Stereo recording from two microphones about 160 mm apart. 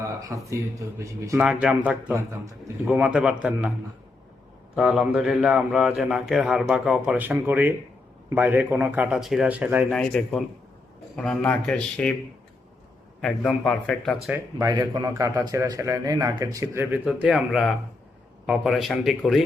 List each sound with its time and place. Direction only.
0.0 s a man's voice: 20° right (ahead or behind)
1.4 s a man's voice: 5° right (ahead or behind)
4.7 s a man's voice: centre (ahead or behind)
9.9 s a man's voice: 5° left (ahead or behind)
13.8 s a man's voice: 5° left (ahead or behind)
14.6 s a man's voice: 25° right (ahead or behind); by 19.5 s centre (ahead or behind)